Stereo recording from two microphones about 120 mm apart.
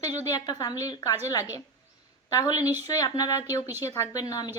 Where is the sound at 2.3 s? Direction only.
30° left (ahead or behind).